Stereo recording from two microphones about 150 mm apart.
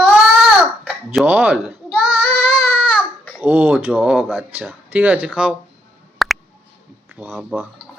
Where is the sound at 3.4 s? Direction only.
15° right (ahead or behind).